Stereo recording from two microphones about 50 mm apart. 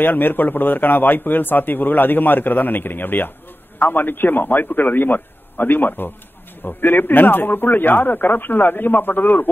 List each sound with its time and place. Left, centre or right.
0.0 s a man's voice: left